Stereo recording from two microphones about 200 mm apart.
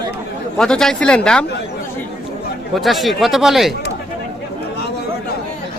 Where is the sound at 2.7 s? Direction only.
Centre (ahead or behind).